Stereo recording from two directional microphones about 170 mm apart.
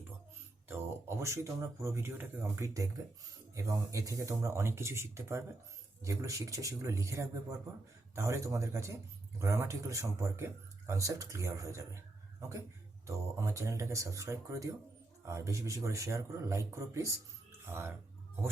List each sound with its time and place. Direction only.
0.7 s speech: 15° right (ahead or behind)